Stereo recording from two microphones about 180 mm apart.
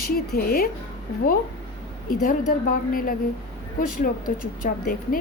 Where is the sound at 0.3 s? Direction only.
55° left (ahead or behind).